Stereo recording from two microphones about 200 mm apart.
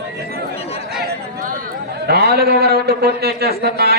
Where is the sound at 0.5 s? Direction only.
30° left (ahead or behind).